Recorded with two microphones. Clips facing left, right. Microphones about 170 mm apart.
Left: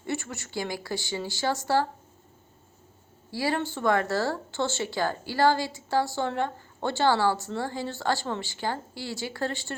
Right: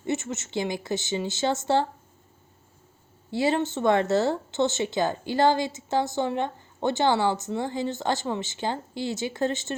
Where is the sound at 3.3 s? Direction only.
20° right (ahead or behind).